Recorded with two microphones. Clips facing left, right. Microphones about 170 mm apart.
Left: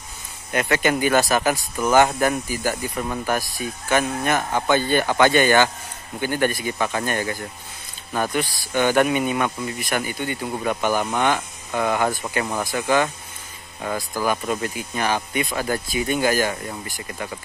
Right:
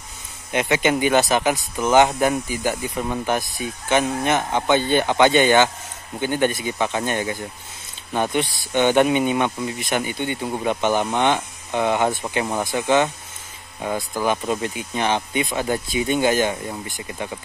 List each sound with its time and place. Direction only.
0.6 s speech: 10° right (ahead or behind)
3.9 s speech: 20° right (ahead or behind)